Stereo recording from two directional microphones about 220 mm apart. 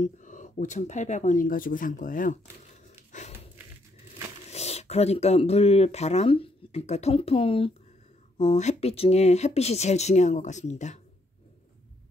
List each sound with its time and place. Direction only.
0.0 s speech: 35° left (ahead or behind)
3.1 s a sound: 30° left (ahead or behind)
4.5 s speech: 30° left (ahead or behind)